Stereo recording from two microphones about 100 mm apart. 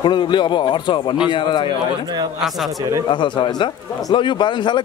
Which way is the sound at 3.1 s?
50° left (ahead or behind).